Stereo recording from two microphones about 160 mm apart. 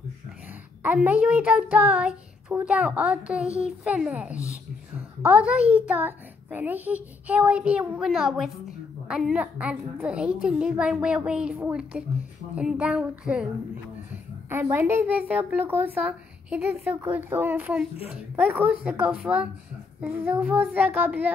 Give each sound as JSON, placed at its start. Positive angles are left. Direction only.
{"t": 0.8, "sound": "a child's voice", "side_deg": -10}
{"t": 14.5, "sound": "a child's voice", "side_deg": -15}